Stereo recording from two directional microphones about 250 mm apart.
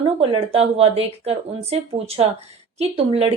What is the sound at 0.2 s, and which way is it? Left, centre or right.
Speech, right.